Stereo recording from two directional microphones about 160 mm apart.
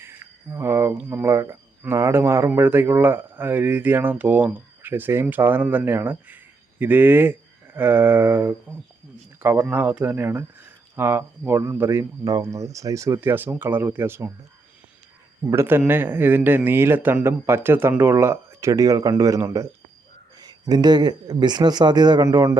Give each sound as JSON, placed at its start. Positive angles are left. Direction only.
{"t": 0.0, "sound": "a sound", "side_deg": -15}
{"t": 0.9, "sound": "speech", "side_deg": -15}
{"t": 15.4, "sound": "a man's voice", "side_deg": -15}